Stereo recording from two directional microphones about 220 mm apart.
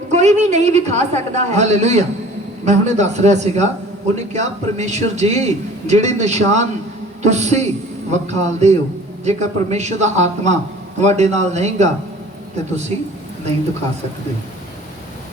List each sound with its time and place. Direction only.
0.1 s a man's voice: 30° right (ahead or behind)